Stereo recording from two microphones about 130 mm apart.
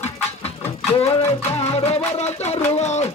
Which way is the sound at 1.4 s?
55° left (ahead or behind).